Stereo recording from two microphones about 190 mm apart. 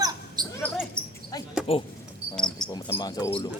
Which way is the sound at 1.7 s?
30° left (ahead or behind).